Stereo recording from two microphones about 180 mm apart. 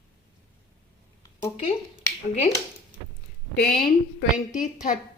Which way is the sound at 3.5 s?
60° left (ahead or behind).